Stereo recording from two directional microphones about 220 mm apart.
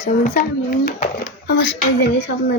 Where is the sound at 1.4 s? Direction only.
50° left (ahead or behind).